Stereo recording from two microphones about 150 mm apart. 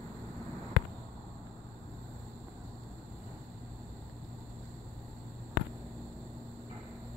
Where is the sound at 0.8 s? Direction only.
90° left.